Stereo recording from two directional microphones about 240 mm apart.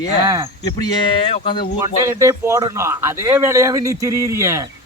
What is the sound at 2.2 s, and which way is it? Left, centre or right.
Speech, centre.